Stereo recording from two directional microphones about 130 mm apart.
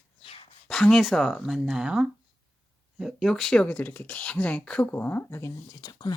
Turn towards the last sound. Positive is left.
turn(degrees=30)  # may be behind; listen again after turning